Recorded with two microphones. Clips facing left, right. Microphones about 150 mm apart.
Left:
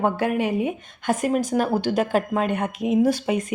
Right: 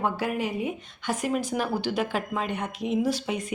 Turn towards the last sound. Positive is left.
turn(degrees=55)  # may be behind; listen again after turning